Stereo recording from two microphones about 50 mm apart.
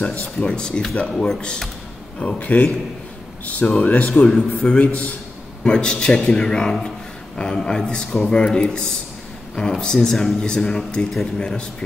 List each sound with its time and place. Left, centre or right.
0.5 s speech: centre
2.1 s speech: left
5.6 s speech: centre